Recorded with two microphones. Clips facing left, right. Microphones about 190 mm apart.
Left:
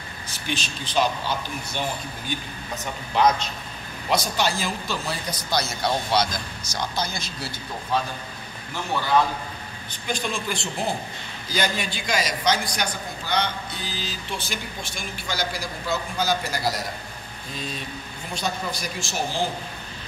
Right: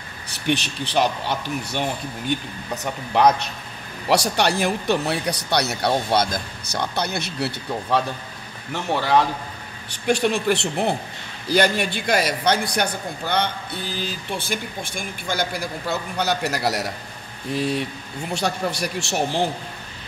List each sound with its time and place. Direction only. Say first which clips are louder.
0.3 s a man's voice: right 8 dB; 65° right (ahead or behind)
9.8 s a man's voice: right 9 dB; 70° right (ahead or behind)